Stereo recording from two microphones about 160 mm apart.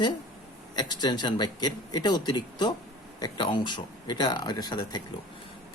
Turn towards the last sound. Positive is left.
turn(degrees=25)  # may be behind; listen again after turning